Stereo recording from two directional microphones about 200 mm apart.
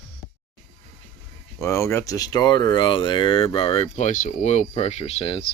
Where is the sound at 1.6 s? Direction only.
15° left (ahead or behind).